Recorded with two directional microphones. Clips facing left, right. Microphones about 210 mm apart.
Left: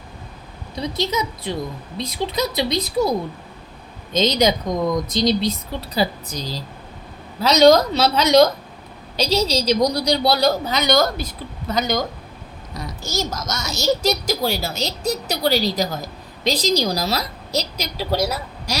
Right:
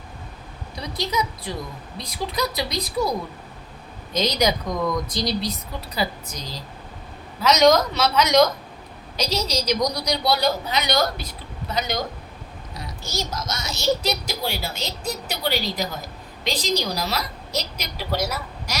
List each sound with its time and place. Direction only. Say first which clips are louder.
0.8 s a woman's voice: left 3 dB; 25° left (ahead or behind); by 11.9 s 45° left (ahead or behind)
13.0 s a woman's voice: left 4 dB; 45° left (ahead or behind)